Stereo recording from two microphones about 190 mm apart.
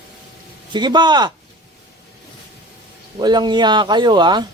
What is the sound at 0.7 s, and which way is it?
Speech, 25° right (ahead or behind).